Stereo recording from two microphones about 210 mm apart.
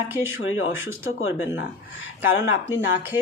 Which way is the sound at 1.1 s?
75° left (ahead or behind).